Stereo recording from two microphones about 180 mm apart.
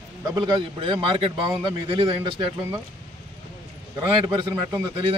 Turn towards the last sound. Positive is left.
turn(degrees=-25)  # may be behind; listen again after turning